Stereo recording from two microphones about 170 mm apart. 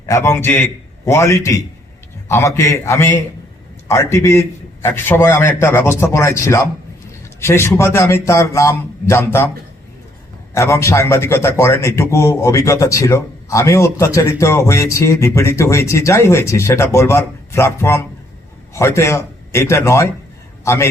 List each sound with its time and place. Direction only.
0.0 s speech: 15° left (ahead or behind)
10.5 s a man's voice: 15° left (ahead or behind)